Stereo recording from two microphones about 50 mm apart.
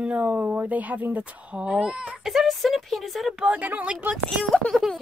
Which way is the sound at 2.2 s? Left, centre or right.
Centre.